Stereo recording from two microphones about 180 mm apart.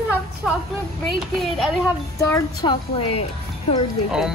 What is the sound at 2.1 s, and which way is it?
A woman's voice, 15° left (ahead or behind).